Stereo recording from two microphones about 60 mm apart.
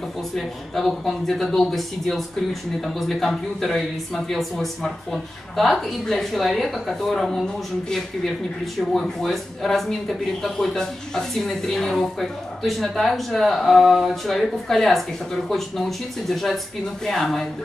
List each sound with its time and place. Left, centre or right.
0.4 s speech: centre